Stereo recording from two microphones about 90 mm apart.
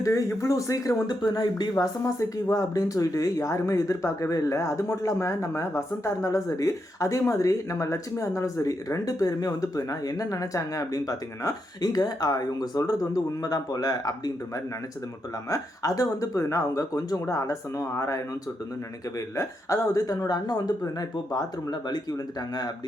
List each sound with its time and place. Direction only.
0.0 s speech: 35° left (ahead or behind); by 1.6 s 50° left (ahead or behind)
1.7 s speech: 35° left (ahead or behind)
15.4 s speech: 40° left (ahead or behind)
19.4 s speech: 35° left (ahead or behind)